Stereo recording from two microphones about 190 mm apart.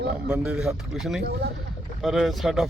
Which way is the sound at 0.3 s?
5° right (ahead or behind).